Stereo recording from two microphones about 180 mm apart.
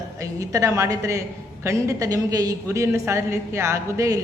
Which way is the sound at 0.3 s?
20° right (ahead or behind).